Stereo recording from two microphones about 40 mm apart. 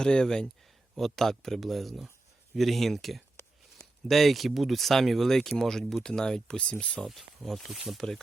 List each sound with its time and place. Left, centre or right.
0.0 s speech: centre
0.9 s speech: centre
6.6 s speech: left
7.0 s speech: centre
7.9 s speech: centre